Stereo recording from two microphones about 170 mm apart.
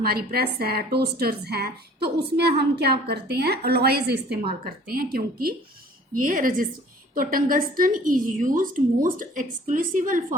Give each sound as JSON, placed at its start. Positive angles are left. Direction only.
{"t": 0.0, "sound": "a woman's voice", "side_deg": -65}